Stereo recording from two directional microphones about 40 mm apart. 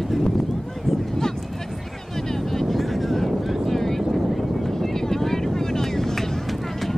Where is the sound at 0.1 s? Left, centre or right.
Centre.